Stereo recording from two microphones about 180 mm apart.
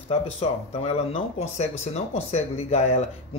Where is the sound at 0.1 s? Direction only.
35° left (ahead or behind).